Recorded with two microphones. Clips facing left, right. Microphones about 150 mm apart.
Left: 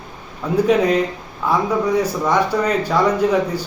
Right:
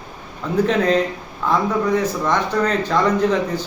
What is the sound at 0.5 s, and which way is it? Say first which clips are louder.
A man's voice: left 2 dB; 10° left (ahead or behind).